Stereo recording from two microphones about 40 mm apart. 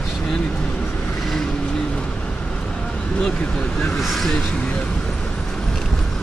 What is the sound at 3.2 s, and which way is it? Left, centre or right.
Speech, centre.